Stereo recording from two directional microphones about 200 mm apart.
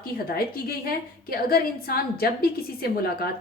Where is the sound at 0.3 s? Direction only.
50° left (ahead or behind).